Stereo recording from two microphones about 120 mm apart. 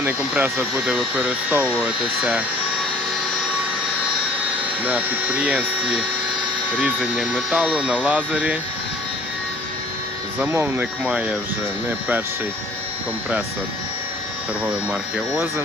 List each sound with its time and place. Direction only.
0.0 s speech: 10° right (ahead or behind)
4.9 s speech: 10° right (ahead or behind)
6.7 s speech: 10° right (ahead or behind)
10.4 s speech: 20° right (ahead or behind)
11.0 s speech: 10° right (ahead or behind)